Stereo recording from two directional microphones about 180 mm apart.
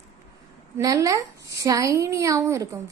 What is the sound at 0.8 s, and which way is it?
A woman's voice, 20° right (ahead or behind).